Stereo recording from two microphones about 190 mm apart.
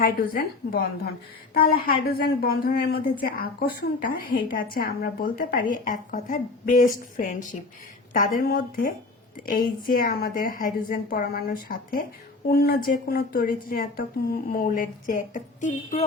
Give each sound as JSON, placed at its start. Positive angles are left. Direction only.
{"t": 0.0, "sound": "a woman's voice", "side_deg": 55}